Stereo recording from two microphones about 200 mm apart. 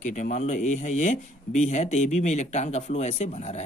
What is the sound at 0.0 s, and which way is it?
Speech, 35° left (ahead or behind).